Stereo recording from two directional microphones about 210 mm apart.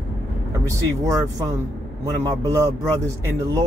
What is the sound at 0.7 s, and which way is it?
Speech, 15° right (ahead or behind).